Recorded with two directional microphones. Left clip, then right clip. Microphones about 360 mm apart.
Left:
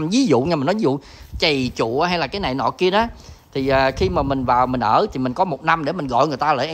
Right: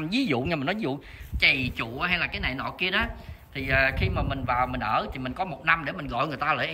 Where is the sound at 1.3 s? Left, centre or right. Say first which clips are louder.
Left 4 dB; centre.